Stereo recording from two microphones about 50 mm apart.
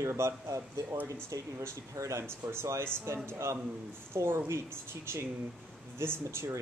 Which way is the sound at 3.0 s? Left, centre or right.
Right.